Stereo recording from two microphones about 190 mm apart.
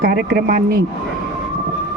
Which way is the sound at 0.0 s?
50° right (ahead or behind).